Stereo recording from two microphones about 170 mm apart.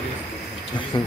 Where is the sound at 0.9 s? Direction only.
25° left (ahead or behind).